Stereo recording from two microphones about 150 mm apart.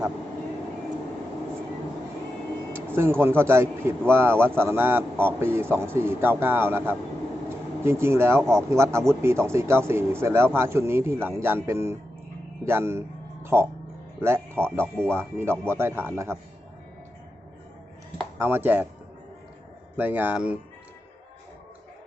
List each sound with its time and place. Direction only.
2.7 s speech: 15° right (ahead or behind)
13.4 s music: 15° right (ahead or behind)
14.2 s speech: 15° right (ahead or behind)
18.3 s speech: 15° right (ahead or behind)
20.0 s speech: 10° right (ahead or behind)